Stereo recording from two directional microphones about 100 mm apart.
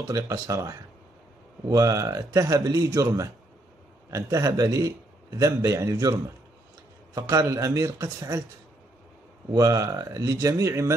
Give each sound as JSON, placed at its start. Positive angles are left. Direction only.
{"t": 0.1, "sound": "speech", "side_deg": -35}
{"t": 7.2, "sound": "speech", "side_deg": -35}
{"t": 9.5, "sound": "speech", "side_deg": -35}